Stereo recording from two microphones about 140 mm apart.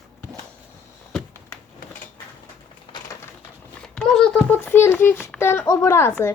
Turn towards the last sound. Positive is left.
turn(degrees=15)  # may be behind; listen again after turning